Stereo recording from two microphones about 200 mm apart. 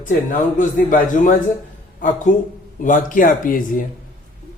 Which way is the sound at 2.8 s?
40° left (ahead or behind).